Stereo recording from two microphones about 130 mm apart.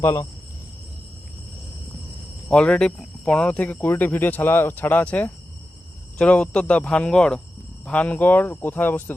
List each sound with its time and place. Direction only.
0.0 s speech: 25° left (ahead or behind)
2.5 s speech: 5° left (ahead or behind)